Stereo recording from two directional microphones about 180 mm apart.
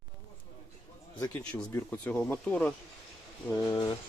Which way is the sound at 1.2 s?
10° left (ahead or behind).